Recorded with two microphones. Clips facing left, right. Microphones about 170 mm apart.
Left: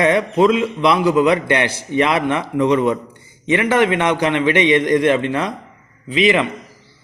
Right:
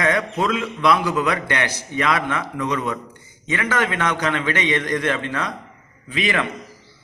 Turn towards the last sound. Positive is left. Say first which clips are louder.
# left 7 dB
turn(degrees=20)  # may be behind; listen again after turning